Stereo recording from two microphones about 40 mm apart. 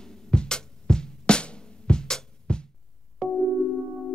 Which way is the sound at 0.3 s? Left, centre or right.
Left.